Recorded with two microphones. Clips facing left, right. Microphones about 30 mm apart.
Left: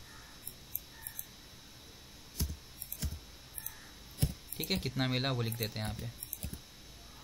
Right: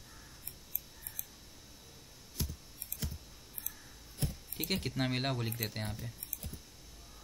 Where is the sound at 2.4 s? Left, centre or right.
Centre.